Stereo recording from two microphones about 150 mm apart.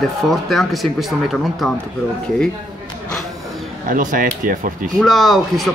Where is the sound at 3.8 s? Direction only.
65° right (ahead or behind).